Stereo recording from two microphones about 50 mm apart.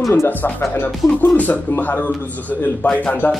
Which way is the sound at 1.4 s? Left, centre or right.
Left.